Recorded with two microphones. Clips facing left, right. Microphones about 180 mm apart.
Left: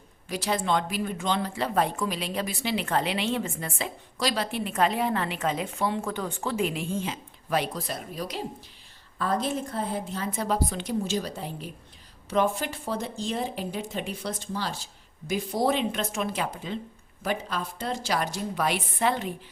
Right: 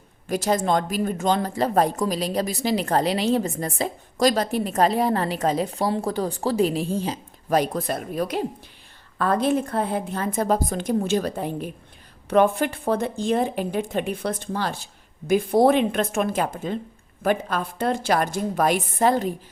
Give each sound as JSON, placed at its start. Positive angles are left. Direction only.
{"t": 0.3, "sound": "a woman's voice", "side_deg": -45}